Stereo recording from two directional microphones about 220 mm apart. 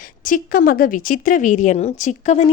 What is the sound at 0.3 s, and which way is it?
A woman's voice, 40° left (ahead or behind).